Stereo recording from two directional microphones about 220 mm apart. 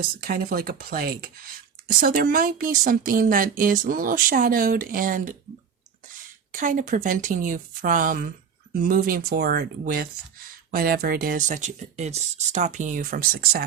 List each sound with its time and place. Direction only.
0.2 s a woman's voice: 40° right (ahead or behind)
6.5 s a woman's voice: 35° right (ahead or behind)